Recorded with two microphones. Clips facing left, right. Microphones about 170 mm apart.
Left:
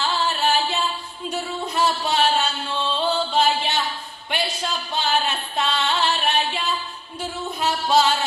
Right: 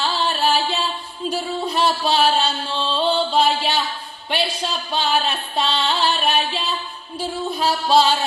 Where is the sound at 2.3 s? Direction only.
30° right (ahead or behind).